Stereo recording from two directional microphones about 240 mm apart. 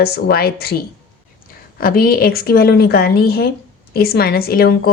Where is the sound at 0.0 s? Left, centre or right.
Left.